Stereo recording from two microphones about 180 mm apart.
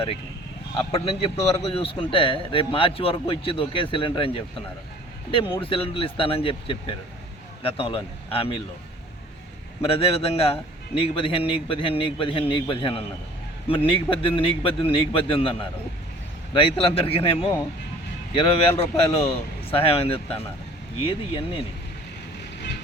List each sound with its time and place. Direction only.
0.7 s a man's voice: 30° left (ahead or behind)
9.8 s a man's voice: 35° left (ahead or behind)